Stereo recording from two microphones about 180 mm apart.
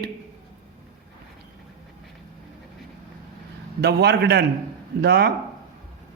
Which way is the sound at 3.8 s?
65° right (ahead or behind).